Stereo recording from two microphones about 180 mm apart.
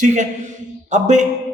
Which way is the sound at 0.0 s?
45° right (ahead or behind).